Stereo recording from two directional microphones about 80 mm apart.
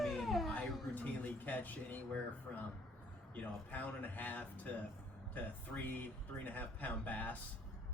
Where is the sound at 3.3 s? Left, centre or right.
Left.